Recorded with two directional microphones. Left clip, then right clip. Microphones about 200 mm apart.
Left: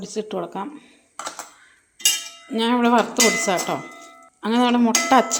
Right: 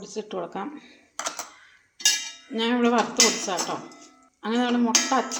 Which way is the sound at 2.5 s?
30° left (ahead or behind).